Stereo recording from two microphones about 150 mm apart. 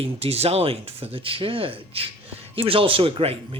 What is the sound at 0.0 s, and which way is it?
Speech, 40° right (ahead or behind).